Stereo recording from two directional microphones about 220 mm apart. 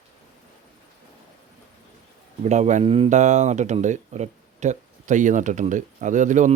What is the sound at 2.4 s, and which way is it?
Speech, 30° right (ahead or behind).